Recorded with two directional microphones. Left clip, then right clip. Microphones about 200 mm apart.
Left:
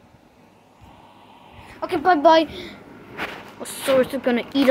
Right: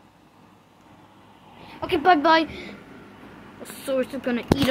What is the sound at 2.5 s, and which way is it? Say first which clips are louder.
Speech: left 2 dB; 20° left (ahead or behind).